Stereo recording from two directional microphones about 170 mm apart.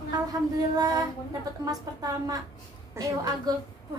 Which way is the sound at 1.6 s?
20° right (ahead or behind).